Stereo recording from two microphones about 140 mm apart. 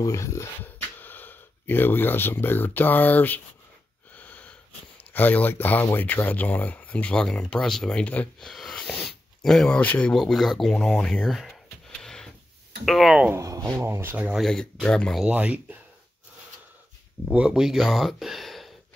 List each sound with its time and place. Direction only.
0.0 s speech: 20° left (ahead or behind)
4.1 s wheeze: 10° left (ahead or behind)
5.1 s speech: 10° left (ahead or behind)
12.0 s a sound: 5° left (ahead or behind)
12.8 s speech: centre (ahead or behind)
13.3 s speech: 25° right (ahead or behind)
14.4 s speech: 5° left (ahead or behind)
15.2 s speech: 10° right (ahead or behind)
17.3 s speech: 5° right (ahead or behind)